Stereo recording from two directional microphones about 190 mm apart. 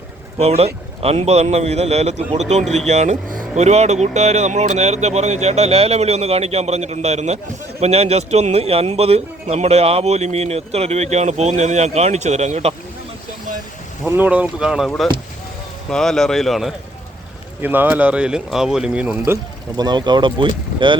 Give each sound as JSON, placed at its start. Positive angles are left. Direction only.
{"t": 0.3, "sound": "speech", "side_deg": -35}
{"t": 14.1, "sound": "speech", "side_deg": -10}
{"t": 19.2, "sound": "speech", "side_deg": -20}